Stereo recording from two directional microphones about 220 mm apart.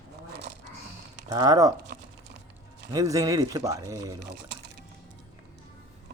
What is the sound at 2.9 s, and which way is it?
Speech, 15° right (ahead or behind).